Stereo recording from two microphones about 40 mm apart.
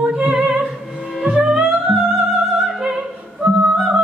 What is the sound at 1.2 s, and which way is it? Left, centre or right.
Music, centre.